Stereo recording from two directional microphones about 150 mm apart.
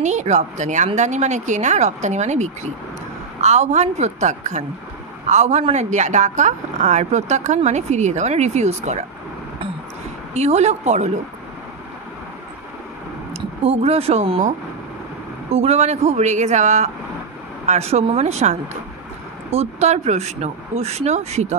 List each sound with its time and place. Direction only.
0.0 s a woman's voice: 50° right (ahead or behind)
10.3 s a woman's voice: 45° right (ahead or behind)
13.3 s speech: 40° right (ahead or behind)
15.5 s a woman's voice: 45° right (ahead or behind)